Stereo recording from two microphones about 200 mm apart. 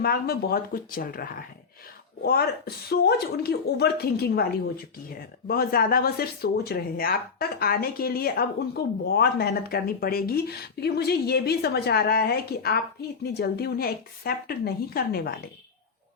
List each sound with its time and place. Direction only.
0.0 s speech: 50° left (ahead or behind)